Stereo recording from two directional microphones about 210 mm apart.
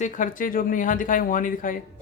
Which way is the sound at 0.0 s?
40° left (ahead or behind).